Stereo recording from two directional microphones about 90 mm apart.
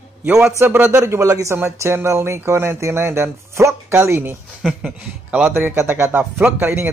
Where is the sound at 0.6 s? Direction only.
30° right (ahead or behind).